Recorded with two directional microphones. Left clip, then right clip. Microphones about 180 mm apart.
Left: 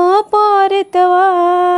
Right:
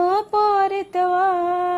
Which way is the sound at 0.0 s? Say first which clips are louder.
Left 8 dB; 40° left (ahead or behind).